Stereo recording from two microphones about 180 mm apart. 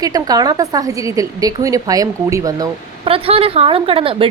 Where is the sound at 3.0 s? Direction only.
30° right (ahead or behind).